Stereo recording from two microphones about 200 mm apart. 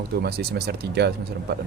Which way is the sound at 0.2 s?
50° right (ahead or behind).